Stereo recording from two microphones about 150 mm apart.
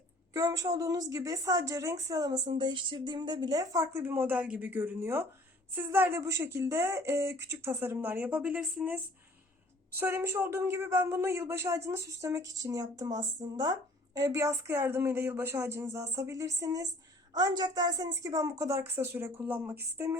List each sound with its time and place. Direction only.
0.3 s a woman's voice: 25° right (ahead or behind)